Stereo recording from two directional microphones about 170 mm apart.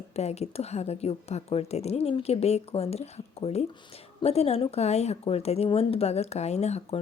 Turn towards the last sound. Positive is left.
turn(degrees=40)  # may be behind; listen again after turning